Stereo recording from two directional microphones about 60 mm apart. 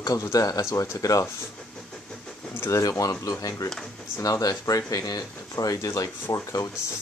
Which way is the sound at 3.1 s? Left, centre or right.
Left.